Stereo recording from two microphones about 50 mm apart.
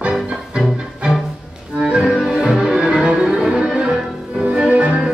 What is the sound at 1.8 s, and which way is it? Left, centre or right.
Music, centre.